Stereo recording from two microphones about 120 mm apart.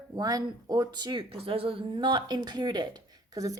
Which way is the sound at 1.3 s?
50° right (ahead or behind).